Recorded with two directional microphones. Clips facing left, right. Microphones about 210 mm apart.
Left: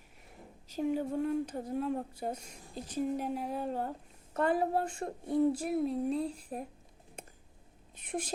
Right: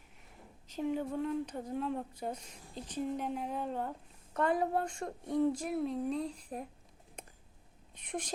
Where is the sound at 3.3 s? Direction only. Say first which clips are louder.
Left 2 dB; 40° left (ahead or behind).